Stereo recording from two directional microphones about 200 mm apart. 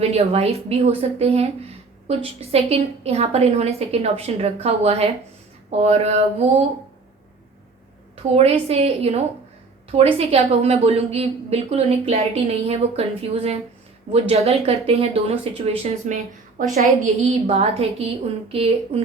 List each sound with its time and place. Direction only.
0.0 s a woman's voice: 30° right (ahead or behind)
8.1 s a woman's voice: 30° right (ahead or behind)